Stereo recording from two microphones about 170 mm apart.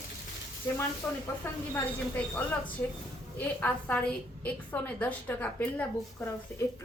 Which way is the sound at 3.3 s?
10° left (ahead or behind).